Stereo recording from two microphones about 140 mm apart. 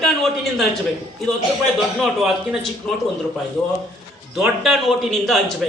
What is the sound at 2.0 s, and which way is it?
Speech, centre (ahead or behind).